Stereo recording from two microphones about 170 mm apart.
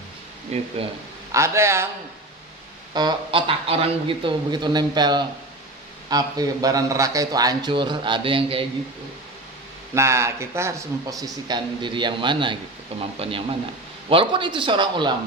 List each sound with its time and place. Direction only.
0.5 s speech: 40° right (ahead or behind)
1.3 s a man's voice: 15° right (ahead or behind)
2.9 s speech: 25° right (ahead or behind)
9.9 s speech: 15° right (ahead or behind)